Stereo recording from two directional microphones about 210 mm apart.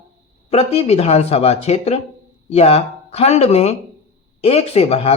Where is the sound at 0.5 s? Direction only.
30° left (ahead or behind).